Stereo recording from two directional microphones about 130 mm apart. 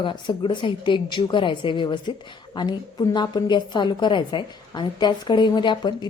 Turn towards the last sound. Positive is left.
turn(degrees=35)  # may be behind; listen again after turning